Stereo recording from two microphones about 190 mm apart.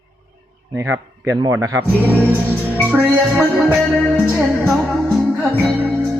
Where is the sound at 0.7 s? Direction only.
15° right (ahead or behind).